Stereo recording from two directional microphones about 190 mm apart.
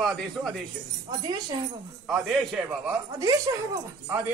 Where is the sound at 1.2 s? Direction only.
20° right (ahead or behind).